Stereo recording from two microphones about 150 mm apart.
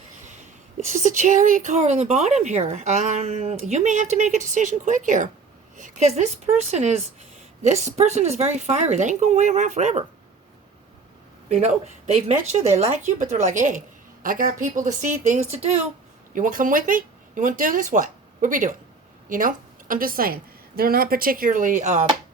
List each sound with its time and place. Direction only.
0.9 s a woman's voice: 55° right (ahead or behind)
11.4 s a woman's voice: 50° right (ahead or behind)
16.3 s a woman's voice: 65° right (ahead or behind)